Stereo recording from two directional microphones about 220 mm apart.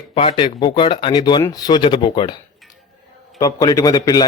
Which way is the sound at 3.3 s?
15° left (ahead or behind).